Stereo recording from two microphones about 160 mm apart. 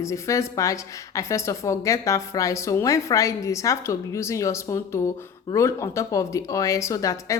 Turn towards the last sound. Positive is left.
turn(degrees=20)  # may be behind; listen again after turning